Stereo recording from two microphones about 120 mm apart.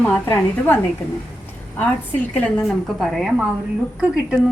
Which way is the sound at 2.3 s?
10° left (ahead or behind).